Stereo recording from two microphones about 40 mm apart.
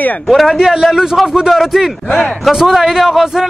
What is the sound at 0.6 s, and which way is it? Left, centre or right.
A man's voice, centre.